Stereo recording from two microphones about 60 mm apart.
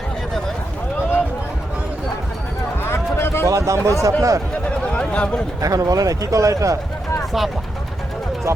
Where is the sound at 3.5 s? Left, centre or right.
Right.